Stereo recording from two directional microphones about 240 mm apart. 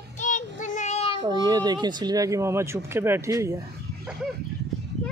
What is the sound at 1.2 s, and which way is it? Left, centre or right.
Speech, centre.